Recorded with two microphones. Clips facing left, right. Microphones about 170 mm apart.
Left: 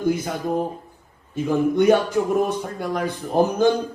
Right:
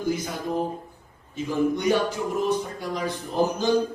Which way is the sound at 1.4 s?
55° left (ahead or behind).